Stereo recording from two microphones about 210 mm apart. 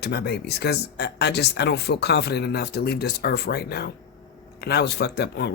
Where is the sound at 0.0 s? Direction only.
50° left (ahead or behind).